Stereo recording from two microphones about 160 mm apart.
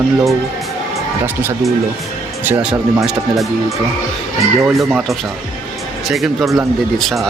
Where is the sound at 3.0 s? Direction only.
Centre (ahead or behind).